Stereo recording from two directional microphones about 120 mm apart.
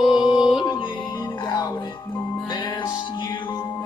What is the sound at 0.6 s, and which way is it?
Music, 40° left (ahead or behind).